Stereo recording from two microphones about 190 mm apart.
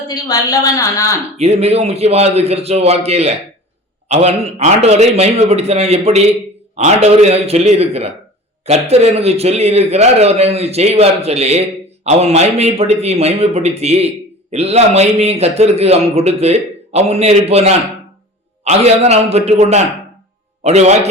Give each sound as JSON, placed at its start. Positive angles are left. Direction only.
{"t": 0.1, "sound": "a woman's voice", "side_deg": 20}
{"t": 1.4, "sound": "a man's voice", "side_deg": -35}